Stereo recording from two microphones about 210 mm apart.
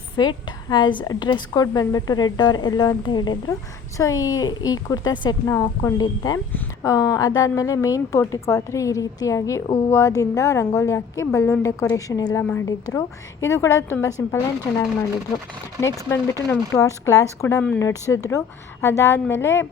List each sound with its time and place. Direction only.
0.2 s a woman's voice: 20° left (ahead or behind)
15.8 s a woman's voice: 15° left (ahead or behind)